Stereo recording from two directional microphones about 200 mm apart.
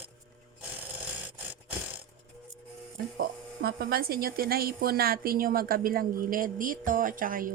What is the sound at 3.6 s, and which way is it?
A woman's voice, 50° right (ahead or behind).